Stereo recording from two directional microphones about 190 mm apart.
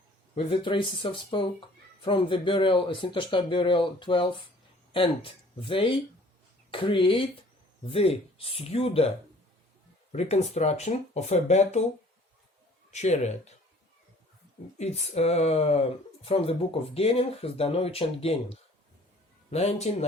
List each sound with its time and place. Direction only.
0.3 s speech: 25° left (ahead or behind)
12.9 s speech: 35° left (ahead or behind)
14.8 s speech: 35° left (ahead or behind)